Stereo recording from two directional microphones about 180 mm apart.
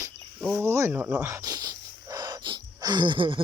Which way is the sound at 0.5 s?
15° right (ahead or behind).